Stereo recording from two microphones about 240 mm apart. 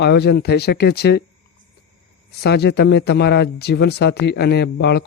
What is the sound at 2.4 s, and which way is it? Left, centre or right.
Speech, left.